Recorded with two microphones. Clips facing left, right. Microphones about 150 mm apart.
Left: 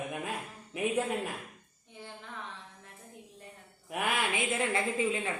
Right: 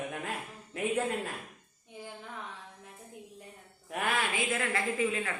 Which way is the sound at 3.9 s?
20° left (ahead or behind).